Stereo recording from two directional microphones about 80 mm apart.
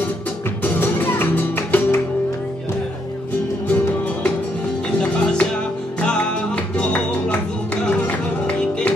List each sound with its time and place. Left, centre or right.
0.7 s music: left
5.1 s music: centre